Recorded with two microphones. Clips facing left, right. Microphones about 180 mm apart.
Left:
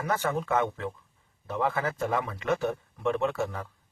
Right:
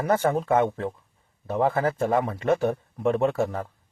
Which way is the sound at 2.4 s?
35° right (ahead or behind).